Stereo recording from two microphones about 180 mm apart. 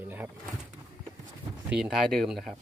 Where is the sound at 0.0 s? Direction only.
10° right (ahead or behind).